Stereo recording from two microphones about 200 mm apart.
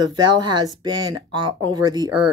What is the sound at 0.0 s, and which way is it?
A woman's voice, 20° right (ahead or behind).